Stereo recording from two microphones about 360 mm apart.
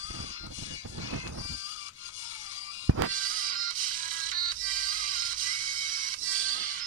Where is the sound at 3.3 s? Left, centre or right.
Right.